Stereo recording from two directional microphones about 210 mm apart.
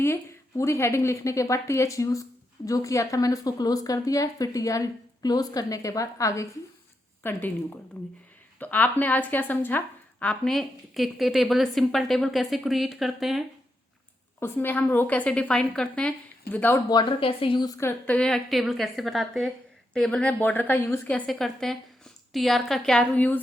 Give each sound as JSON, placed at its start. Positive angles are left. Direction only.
{"t": 0.0, "sound": "a woman's voice", "side_deg": 15}
{"t": 14.3, "sound": "a woman's voice", "side_deg": 10}